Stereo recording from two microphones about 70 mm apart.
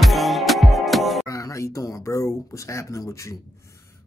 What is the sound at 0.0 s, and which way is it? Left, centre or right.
Music, centre.